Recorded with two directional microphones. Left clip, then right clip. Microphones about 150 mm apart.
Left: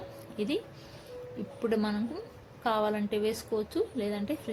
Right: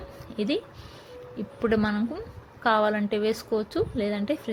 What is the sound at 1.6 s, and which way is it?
A woman's voice, 20° right (ahead or behind).